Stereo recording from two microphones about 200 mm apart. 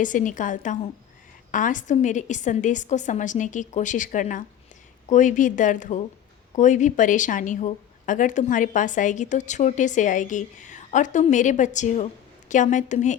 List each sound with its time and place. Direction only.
0.0 s a woman's voice: 40° left (ahead or behind)